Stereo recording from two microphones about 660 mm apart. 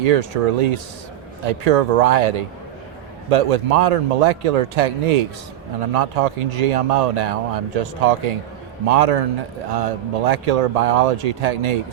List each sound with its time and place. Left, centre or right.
0.0 s speech: right